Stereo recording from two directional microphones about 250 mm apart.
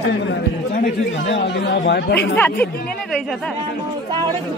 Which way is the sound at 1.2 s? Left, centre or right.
Left.